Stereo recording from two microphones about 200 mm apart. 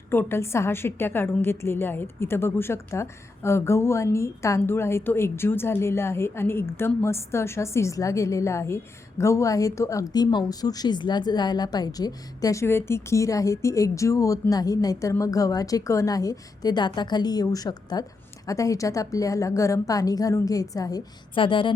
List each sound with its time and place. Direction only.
0.1 s a woman's voice: 10° left (ahead or behind)